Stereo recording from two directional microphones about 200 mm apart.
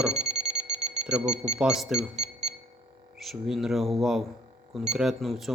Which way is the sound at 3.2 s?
Centre (ahead or behind).